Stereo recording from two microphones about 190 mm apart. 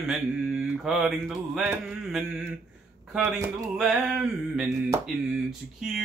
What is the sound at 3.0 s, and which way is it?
Speech, centre (ahead or behind).